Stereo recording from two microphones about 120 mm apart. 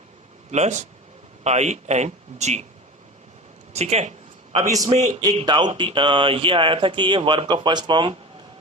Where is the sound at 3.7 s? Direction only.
65° right (ahead or behind).